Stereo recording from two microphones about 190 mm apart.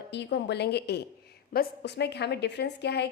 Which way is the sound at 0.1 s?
65° left (ahead or behind).